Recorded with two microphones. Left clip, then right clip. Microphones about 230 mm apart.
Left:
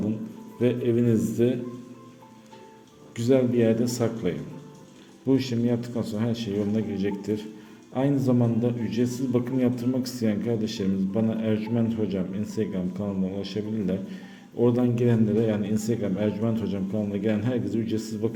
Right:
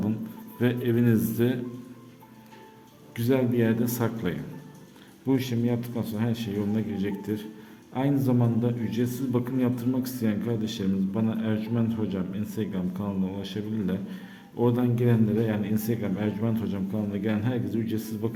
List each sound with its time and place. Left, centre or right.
0.6 s speech: centre
3.2 s a man's voice: centre